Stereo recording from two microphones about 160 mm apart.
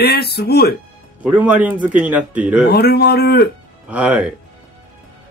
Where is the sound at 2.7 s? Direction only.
80° left.